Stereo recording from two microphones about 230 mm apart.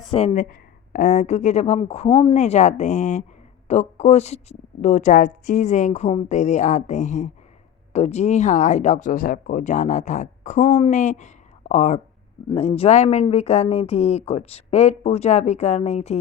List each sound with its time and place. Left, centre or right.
0.1 s speech: left